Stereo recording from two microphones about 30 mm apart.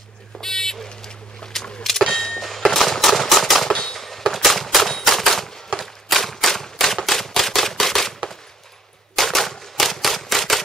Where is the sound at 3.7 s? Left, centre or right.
Left.